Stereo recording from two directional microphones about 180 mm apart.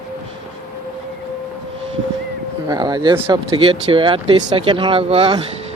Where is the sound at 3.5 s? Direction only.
30° right (ahead or behind).